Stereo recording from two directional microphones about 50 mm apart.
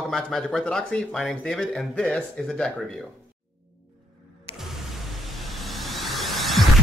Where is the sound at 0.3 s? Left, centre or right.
Centre.